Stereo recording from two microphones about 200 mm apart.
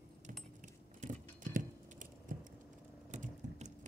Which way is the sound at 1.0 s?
40° right (ahead or behind).